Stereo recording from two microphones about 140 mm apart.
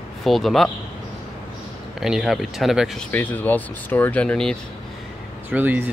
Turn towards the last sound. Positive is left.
turn(degrees=-15)  # may be behind; listen again after turning